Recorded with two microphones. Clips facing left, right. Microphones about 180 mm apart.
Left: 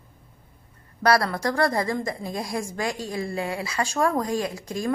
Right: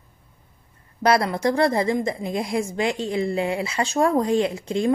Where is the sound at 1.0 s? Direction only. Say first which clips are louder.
Right 2 dB; 20° right (ahead or behind).